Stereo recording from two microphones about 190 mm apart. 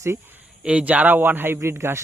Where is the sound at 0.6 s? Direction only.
5° right (ahead or behind).